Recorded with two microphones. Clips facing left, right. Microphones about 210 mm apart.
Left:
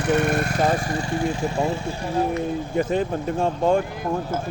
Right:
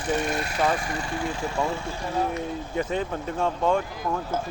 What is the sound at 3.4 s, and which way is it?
Speech, 30° left (ahead or behind).